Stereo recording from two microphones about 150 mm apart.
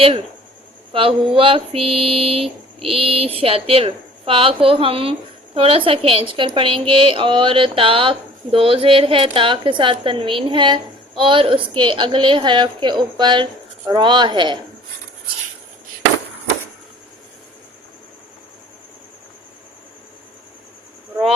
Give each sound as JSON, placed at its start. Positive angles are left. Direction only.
{"t": 1.4, "sound": "a woman's voice", "side_deg": -35}